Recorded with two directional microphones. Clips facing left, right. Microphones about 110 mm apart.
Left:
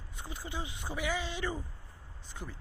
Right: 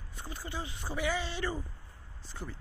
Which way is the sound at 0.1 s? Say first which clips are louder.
Right 1 dB; 15° left (ahead or behind).